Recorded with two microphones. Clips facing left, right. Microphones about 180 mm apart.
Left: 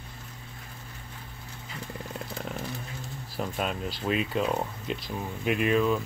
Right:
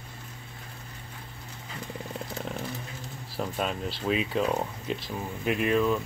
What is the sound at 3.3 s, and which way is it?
Speech, centre (ahead or behind).